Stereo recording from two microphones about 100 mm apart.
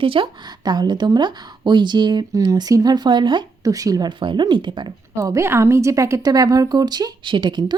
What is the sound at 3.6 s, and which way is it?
A woman's voice, 35° right (ahead or behind).